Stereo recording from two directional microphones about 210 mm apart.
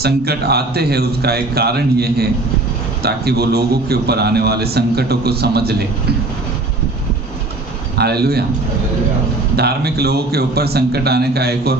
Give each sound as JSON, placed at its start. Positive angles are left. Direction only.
{"t": 0.0, "sound": "a man's voice", "side_deg": -50}
{"t": 7.9, "sound": "a man's voice", "side_deg": -50}
{"t": 9.6, "sound": "a man's voice", "side_deg": -50}